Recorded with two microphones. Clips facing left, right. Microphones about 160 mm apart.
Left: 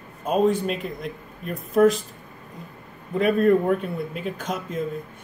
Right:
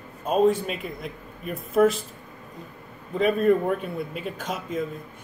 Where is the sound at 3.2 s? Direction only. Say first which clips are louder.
Left 2 dB; centre (ahead or behind).